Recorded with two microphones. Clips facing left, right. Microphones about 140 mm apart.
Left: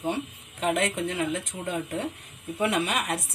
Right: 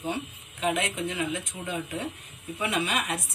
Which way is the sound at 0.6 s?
55° left (ahead or behind).